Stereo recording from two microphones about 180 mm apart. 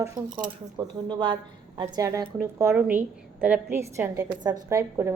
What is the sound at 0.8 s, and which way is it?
A woman's voice, 25° right (ahead or behind).